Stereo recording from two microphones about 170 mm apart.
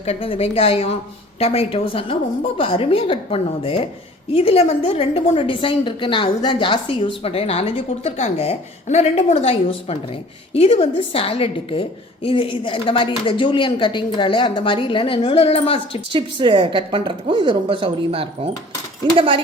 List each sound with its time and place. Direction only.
0.0 s a woman's voice: 35° left (ahead or behind)
16.1 s a woman's voice: 30° right (ahead or behind)